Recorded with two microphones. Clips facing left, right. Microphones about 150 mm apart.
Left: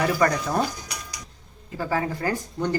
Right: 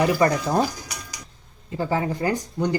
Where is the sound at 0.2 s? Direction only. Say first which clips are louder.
Right 2 dB; 25° right (ahead or behind).